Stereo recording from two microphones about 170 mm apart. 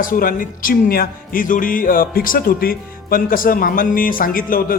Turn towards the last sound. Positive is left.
turn(degrees=55)  # may be behind; listen again after turning